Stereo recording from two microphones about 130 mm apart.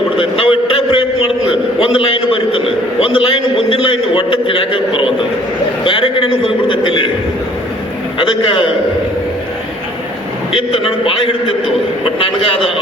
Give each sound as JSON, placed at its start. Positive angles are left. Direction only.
{"t": 0.2, "sound": "a man's voice", "side_deg": 45}
{"t": 5.8, "sound": "a sound", "side_deg": 40}
{"t": 10.5, "sound": "a man's voice", "side_deg": 45}